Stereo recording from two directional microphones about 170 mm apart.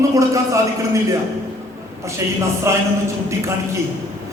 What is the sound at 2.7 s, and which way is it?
Speech, 15° right (ahead or behind).